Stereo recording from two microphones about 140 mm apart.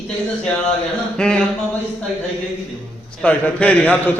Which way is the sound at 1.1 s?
5° left (ahead or behind).